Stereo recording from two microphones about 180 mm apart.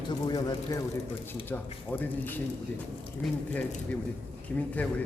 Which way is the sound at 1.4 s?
10° left (ahead or behind).